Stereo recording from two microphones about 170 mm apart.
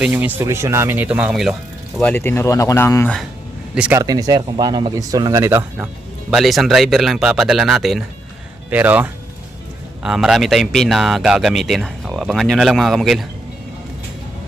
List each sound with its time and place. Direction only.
0.0 s speech: 10° right (ahead or behind)
2.0 s speech: 10° left (ahead or behind)
3.9 s speech: 20° right (ahead or behind)
6.3 s speech: centre (ahead or behind)